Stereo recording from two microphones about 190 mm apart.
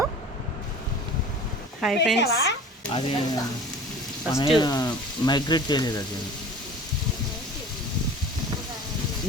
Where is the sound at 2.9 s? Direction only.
30° left (ahead or behind).